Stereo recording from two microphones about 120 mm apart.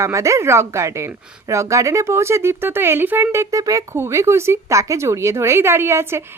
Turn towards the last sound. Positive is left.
turn(degrees=-20)  # may be behind; listen again after turning